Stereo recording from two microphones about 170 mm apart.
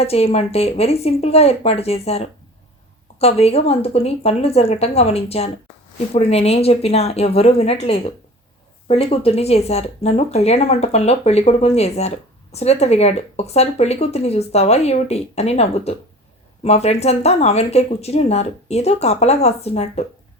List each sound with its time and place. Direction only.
0.0 s speech: 35° left (ahead or behind)